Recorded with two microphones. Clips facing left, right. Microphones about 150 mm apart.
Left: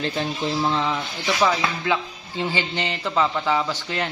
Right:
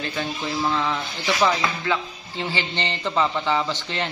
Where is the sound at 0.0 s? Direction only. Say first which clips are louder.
Left 3 dB; 35° left (ahead or behind).